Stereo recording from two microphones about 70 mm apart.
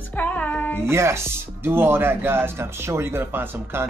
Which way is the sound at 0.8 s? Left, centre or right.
Right.